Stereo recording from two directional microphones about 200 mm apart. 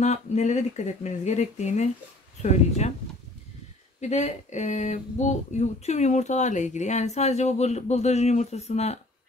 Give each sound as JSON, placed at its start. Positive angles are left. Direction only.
{"t": 0.0, "sound": "speech", "side_deg": 35}
{"t": 4.0, "sound": "speech", "side_deg": 35}